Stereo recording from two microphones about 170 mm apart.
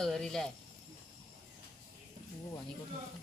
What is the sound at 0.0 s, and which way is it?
Speech, 5° left (ahead or behind).